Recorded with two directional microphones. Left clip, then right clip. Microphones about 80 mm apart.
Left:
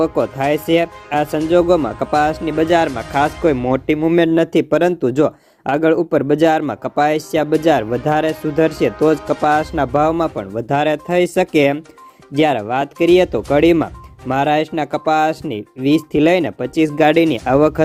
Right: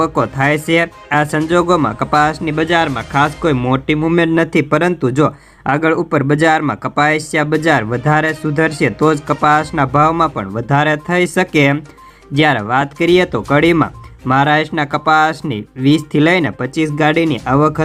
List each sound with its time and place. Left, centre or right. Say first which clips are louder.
0.0 s speech: right 2 dB; left
4.2 s speech: right 1 dB; left